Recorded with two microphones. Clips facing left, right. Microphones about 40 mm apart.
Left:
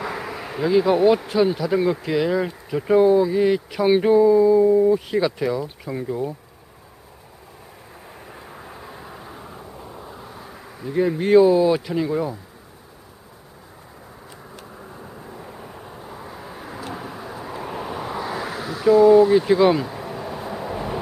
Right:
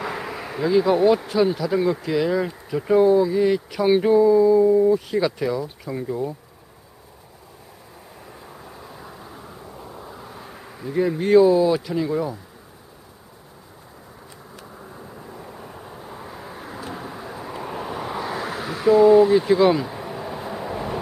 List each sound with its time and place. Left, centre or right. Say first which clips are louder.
0.0 s bee: even; centre
1.3 s speech: left 1 dB; centre
8.2 s vehicle: left 1 dB; left
9.6 s bee: even; centre
14.8 s vehicle: even; centre
18.4 s a sound: left 1 dB; centre
19.3 s speech: left 1 dB; centre
19.9 s vehicle: even; centre